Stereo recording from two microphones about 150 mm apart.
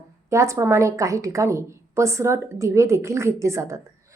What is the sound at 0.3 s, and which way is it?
A woman's voice, 20° right (ahead or behind).